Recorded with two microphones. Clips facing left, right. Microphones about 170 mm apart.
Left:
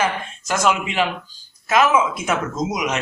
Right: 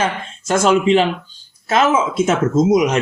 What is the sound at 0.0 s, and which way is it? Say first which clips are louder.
Speech: right 1 dB; 30° right (ahead or behind).